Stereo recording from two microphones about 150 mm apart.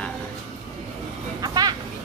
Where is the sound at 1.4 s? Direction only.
25° right (ahead or behind).